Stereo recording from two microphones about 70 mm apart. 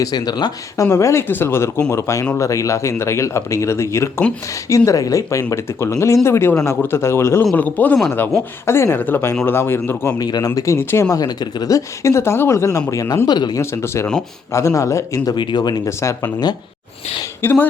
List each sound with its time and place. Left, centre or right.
0.0 s speech: left
0.9 s speech: left
1.3 s a man's voice: left
7.5 s a man's voice: left
10.2 s speech: left
11.1 s speech: left
12.0 s a man's voice: left
13.2 s speech: left
13.6 s a man's voice: left
15.2 s speech: left
15.9 s a man's voice: left
16.2 s speech: left
17.4 s a man's voice: left